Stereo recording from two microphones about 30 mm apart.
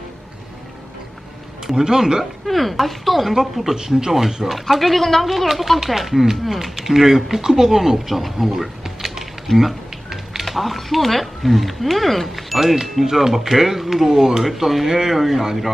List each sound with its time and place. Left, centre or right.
1.7 s speech: right
2.5 s speech: centre
4.7 s speech: centre
6.7 s speech: centre
9.6 s a sound: centre
10.4 s speech: centre
12.5 s speech: centre
14.4 s speech: centre
14.8 s speech: centre
15.1 s speech: centre